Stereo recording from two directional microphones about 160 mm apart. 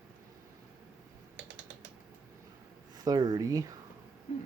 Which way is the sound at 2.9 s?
25° right (ahead or behind).